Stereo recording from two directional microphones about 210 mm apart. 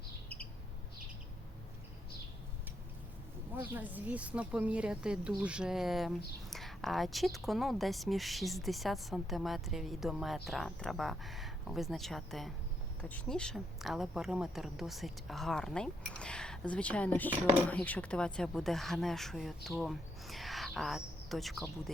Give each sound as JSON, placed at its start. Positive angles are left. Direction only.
{"t": 3.6, "sound": "a woman's voice", "side_deg": -10}